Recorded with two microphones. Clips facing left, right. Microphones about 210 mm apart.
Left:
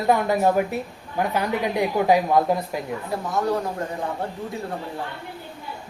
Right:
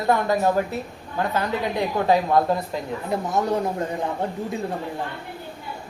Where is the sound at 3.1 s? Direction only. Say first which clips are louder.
Right 1 dB; 20° right (ahead or behind).